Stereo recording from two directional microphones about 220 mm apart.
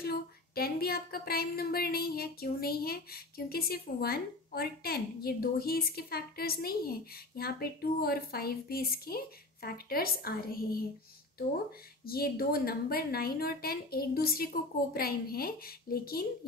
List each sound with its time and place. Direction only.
0.0 s speech: 45° left (ahead or behind)
12.1 s speech: 45° left (ahead or behind)